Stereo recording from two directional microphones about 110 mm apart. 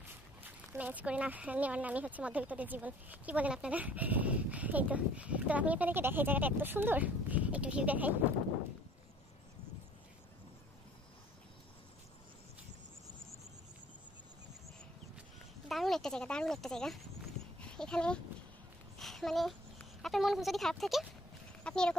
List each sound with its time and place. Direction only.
0.4 s speech: 15° right (ahead or behind)
15.7 s speech: centre (ahead or behind)